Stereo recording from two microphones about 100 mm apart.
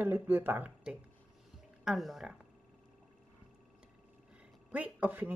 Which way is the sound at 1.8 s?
Centre (ahead or behind).